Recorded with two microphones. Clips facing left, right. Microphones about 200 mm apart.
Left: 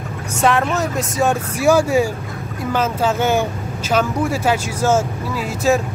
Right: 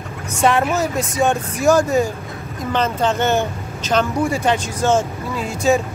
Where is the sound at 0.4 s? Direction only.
Centre (ahead or behind).